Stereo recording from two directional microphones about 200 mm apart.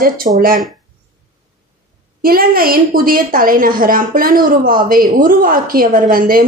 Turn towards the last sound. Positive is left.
turn(degrees=-45)  # may be behind; listen again after turning